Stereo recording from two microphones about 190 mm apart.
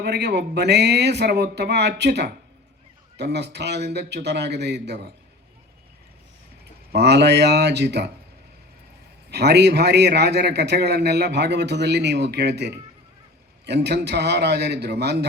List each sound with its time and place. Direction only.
0.0 s a man's voice: 60° right (ahead or behind)
6.9 s a man's voice: 60° right (ahead or behind)
9.3 s a man's voice: 60° right (ahead or behind)